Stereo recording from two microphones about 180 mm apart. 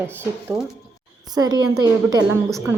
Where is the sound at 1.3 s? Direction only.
20° right (ahead or behind).